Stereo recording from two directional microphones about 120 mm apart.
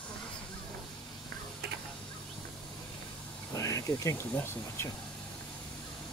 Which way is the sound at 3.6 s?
25° left (ahead or behind).